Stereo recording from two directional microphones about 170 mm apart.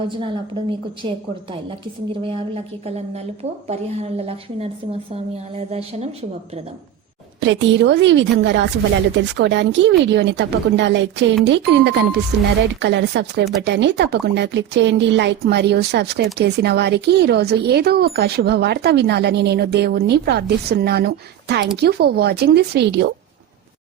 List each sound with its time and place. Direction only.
0.2 s a woman's voice: 30° right (ahead or behind)
2.2 s a woman's voice: 35° right (ahead or behind)
7.4 s speech: 90° right
13.6 s speech: 90° right